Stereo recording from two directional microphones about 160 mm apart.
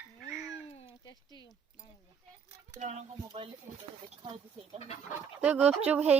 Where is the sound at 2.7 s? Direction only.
45° right (ahead or behind).